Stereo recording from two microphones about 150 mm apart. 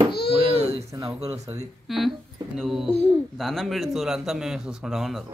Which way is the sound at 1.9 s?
Centre (ahead or behind).